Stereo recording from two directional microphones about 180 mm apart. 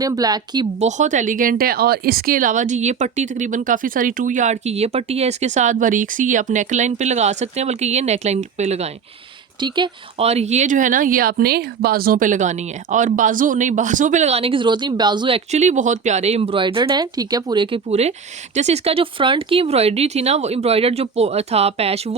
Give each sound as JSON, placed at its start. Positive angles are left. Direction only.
{"t": 0.0, "sound": "speech", "side_deg": -20}
{"t": 0.8, "sound": "speech", "side_deg": -40}
{"t": 9.6, "sound": "speech", "side_deg": -25}
{"t": 15.5, "sound": "speech", "side_deg": -40}